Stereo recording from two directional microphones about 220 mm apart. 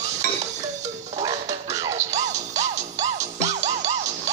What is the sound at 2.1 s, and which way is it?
Music, 30° right (ahead or behind).